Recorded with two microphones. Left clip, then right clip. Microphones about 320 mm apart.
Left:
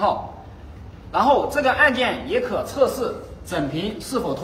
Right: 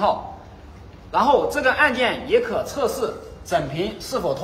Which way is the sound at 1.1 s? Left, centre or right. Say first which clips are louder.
Even; centre.